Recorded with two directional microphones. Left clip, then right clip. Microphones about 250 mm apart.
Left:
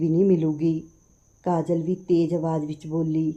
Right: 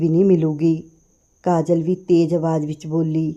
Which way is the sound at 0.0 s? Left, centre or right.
Right.